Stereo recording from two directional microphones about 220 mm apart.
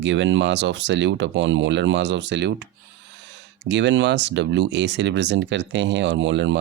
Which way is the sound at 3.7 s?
55° right (ahead or behind).